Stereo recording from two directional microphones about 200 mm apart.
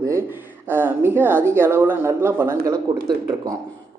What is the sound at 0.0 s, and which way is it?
Speech, 10° right (ahead or behind).